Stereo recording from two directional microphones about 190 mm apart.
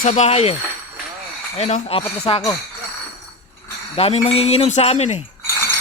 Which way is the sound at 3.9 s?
30° left (ahead or behind).